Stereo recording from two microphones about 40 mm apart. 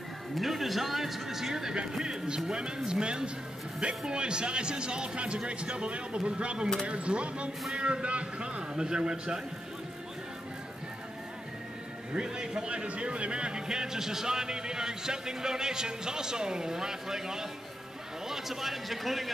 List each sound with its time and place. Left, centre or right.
0.4 s a man's voice: centre; by 9.4 s right
12.1 s a man's voice: right; by 19.3 s centre